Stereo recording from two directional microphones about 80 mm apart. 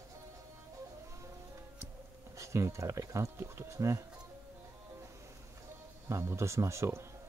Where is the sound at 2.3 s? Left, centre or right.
Right.